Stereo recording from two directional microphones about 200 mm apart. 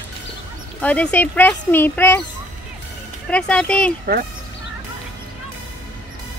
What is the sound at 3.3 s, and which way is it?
Speech, 5° left (ahead or behind).